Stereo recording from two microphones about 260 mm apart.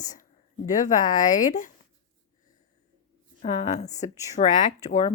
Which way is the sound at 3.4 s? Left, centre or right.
Left.